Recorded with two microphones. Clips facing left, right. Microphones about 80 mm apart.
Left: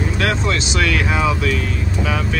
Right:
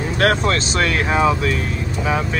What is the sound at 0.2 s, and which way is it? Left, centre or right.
Speech, right.